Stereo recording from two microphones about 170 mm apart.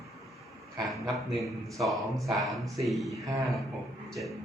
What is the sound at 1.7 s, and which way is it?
A man's voice, centre (ahead or behind).